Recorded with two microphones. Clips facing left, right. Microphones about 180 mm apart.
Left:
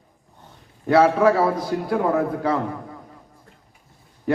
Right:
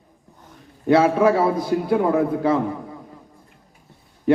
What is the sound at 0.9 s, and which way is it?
A man's voice, 20° right (ahead or behind).